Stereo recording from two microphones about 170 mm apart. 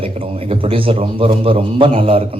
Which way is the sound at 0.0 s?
35° right (ahead or behind).